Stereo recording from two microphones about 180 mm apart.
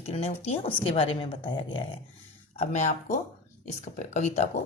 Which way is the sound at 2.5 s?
40° left (ahead or behind).